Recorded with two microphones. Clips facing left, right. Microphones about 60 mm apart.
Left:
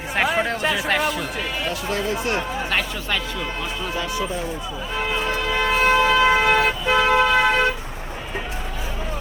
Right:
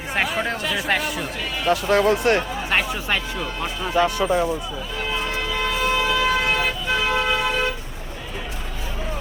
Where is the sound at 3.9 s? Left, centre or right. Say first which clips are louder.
Right 9 dB; right.